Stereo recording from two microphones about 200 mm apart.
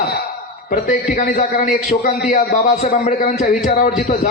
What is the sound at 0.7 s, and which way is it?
A man's voice, 40° left (ahead or behind).